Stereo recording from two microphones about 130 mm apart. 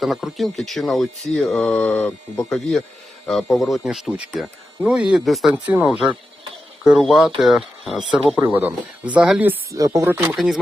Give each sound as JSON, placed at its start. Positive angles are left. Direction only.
{"t": 0.0, "sound": "speech", "side_deg": 0}
{"t": 4.8, "sound": "speech", "side_deg": -10}
{"t": 5.6, "sound": "speech", "side_deg": -10}
{"t": 9.7, "sound": "speech", "side_deg": -25}
{"t": 10.1, "sound": "speech", "side_deg": -15}
{"t": 10.3, "sound": "speech", "side_deg": 0}